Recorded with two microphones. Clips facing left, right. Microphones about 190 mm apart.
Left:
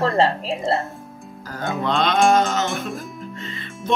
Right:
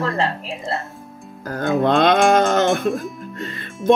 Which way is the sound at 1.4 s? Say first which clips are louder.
Right 6 dB; 55° right (ahead or behind).